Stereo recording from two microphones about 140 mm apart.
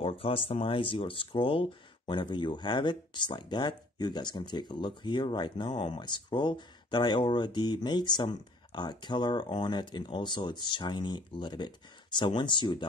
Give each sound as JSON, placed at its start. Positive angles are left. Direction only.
{"t": 0.0, "sound": "speech", "side_deg": 40}